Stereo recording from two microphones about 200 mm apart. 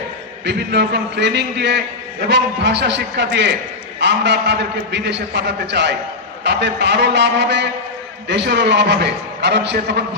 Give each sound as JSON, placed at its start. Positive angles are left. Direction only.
{"t": 0.4, "sound": "a man's voice", "side_deg": -60}